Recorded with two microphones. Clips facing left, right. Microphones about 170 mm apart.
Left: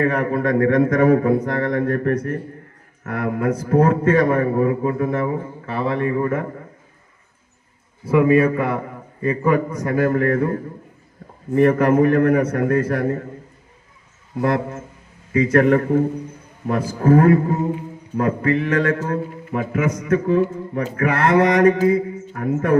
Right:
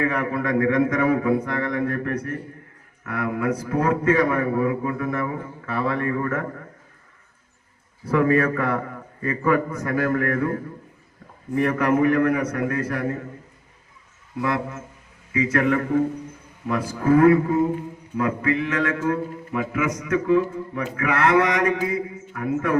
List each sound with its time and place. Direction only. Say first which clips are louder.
0.0 s a man's voice: left 4 dB; 35° left (ahead or behind); by 6.5 s 20° left (ahead or behind)
8.1 s a man's voice: left 4 dB; 15° left (ahead or behind); by 13.1 s 40° left (ahead or behind)
14.4 s a man's voice: left 5 dB; 45° left (ahead or behind)